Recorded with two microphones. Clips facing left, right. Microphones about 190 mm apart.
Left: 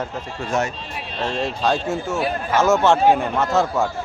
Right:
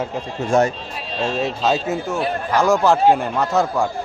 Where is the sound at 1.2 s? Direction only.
5° right (ahead or behind).